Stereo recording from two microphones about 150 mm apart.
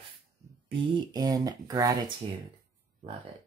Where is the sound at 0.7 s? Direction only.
30° right (ahead or behind).